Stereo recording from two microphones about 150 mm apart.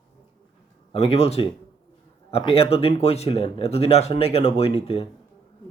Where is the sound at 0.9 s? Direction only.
40° left (ahead or behind).